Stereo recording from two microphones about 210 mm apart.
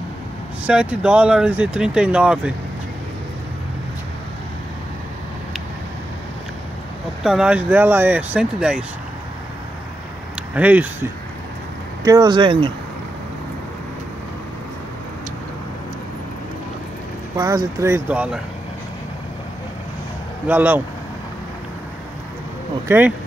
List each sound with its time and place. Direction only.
0.7 s speech: 5° right (ahead or behind)
7.2 s speech: 5° right (ahead or behind)
10.5 s speech: 5° right (ahead or behind)
12.0 s speech: 20° right (ahead or behind)
17.4 s speech: 15° right (ahead or behind)
20.4 s speech: 10° right (ahead or behind)
22.8 s speech: 10° right (ahead or behind)